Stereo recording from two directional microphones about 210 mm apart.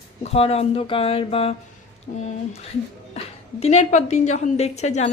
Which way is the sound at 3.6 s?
35° left (ahead or behind).